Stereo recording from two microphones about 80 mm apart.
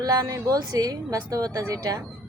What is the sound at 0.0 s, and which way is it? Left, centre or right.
Speech, right.